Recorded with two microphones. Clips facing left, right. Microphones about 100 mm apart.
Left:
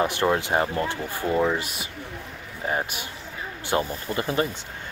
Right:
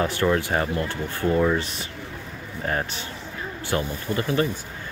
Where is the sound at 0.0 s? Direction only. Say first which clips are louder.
Even; 20° left (ahead or behind).